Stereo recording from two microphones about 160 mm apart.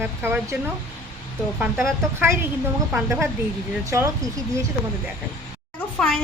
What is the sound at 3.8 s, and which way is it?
Speech, 20° right (ahead or behind).